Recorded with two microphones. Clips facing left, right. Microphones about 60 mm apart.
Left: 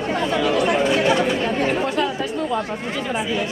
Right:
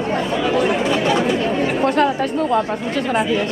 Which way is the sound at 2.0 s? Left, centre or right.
Right.